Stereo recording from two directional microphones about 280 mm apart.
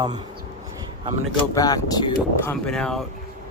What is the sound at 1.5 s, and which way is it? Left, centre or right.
Speech, centre.